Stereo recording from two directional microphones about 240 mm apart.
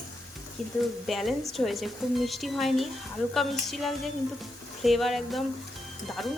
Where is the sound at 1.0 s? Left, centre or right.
Centre.